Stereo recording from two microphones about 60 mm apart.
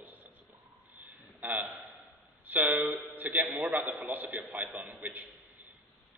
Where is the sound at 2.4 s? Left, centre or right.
Right.